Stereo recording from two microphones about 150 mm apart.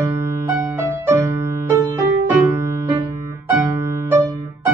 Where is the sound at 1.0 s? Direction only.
20° right (ahead or behind).